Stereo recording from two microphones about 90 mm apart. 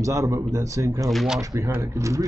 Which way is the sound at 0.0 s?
40° right (ahead or behind).